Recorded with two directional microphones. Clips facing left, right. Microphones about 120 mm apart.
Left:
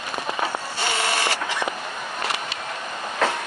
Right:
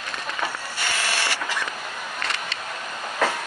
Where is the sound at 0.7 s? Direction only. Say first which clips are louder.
Left 4 dB; 25° left (ahead or behind).